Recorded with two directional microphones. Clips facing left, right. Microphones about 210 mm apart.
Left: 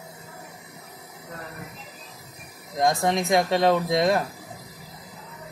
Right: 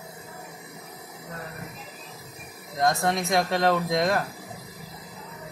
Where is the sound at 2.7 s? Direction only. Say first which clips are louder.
Left 2 dB; 15° left (ahead or behind).